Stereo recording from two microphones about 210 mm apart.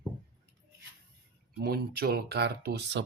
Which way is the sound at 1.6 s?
45° right (ahead or behind).